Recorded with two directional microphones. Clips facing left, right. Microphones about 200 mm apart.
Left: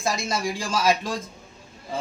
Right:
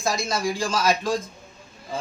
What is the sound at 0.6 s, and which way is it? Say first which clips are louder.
Speech: right 2 dB; 5° left (ahead or behind).